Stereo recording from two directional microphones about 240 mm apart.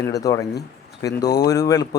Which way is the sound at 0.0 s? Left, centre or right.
Centre.